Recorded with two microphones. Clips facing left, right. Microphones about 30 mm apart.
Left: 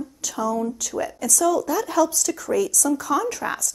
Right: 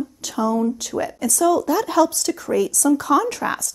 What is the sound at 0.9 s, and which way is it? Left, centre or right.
Speech, right.